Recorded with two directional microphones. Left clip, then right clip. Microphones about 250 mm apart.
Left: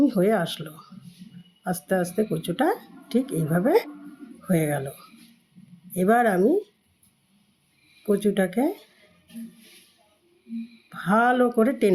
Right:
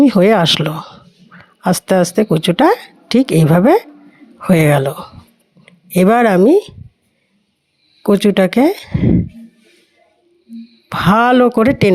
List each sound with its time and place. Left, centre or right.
0.0 s a woman's voice: right
8.0 s a woman's voice: right
10.8 s a woman's voice: right